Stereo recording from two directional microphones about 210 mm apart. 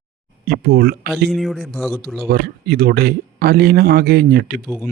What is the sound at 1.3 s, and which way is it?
Speech, centre (ahead or behind).